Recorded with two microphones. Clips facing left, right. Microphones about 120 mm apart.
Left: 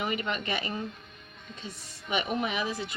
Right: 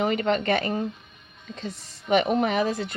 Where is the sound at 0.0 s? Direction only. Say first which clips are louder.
Right 8 dB; 50° right (ahead or behind).